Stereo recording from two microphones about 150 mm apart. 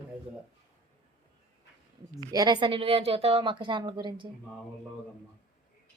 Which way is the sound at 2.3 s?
30° right (ahead or behind).